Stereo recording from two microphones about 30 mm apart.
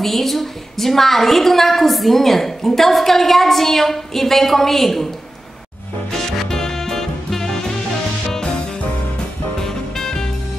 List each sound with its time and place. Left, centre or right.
0.0 s a woman's voice: centre
6.1 s music: centre
9.6 s music: centre